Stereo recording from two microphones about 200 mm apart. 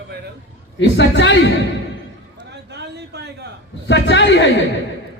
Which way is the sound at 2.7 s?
55° right (ahead or behind).